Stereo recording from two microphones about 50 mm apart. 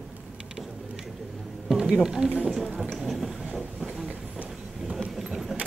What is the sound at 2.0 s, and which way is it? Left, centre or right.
Speech, centre.